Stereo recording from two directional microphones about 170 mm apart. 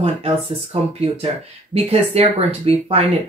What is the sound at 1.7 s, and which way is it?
Speech, 35° right (ahead or behind).